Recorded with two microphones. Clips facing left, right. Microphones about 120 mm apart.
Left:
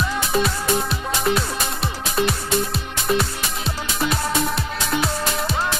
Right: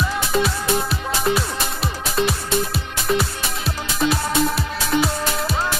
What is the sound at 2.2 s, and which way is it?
Music, centre (ahead or behind).